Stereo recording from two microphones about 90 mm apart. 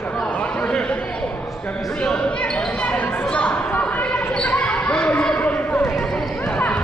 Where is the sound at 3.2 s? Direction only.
15° left (ahead or behind).